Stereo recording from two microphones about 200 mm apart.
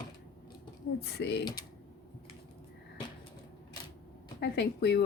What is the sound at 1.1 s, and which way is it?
Speech, 55° left (ahead or behind).